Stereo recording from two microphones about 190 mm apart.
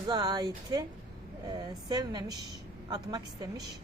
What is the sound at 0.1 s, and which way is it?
A woman's voice, 20° right (ahead or behind).